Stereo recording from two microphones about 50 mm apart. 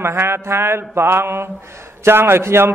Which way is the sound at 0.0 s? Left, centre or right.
Right.